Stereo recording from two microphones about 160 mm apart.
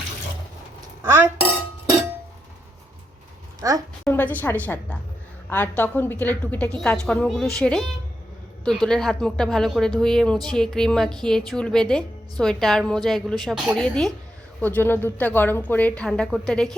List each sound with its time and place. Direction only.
3.6 s a woman's voice: 20° right (ahead or behind)
4.0 s a woman's voice: 10° left (ahead or behind)